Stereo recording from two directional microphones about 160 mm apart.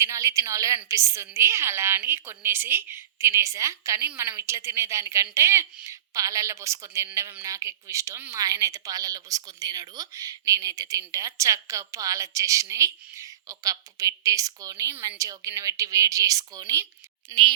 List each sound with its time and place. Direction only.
0.0 s a woman's voice: 20° right (ahead or behind)